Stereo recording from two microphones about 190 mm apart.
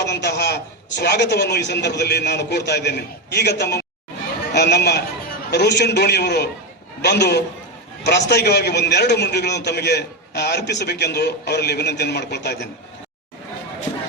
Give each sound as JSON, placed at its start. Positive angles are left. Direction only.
{"t": 0.0, "sound": "a man's voice", "side_deg": 60}